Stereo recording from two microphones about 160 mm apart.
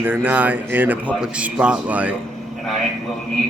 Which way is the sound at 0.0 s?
10° right (ahead or behind).